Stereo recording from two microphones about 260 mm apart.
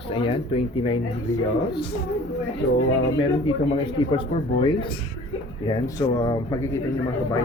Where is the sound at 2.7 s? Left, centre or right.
Left.